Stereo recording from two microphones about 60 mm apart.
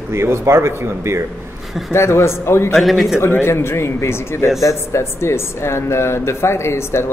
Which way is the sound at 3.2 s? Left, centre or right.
Left.